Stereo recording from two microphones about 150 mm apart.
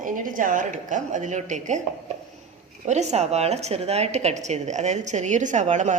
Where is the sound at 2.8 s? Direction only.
50° right (ahead or behind).